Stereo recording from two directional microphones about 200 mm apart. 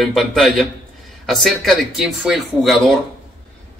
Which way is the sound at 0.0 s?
Centre (ahead or behind).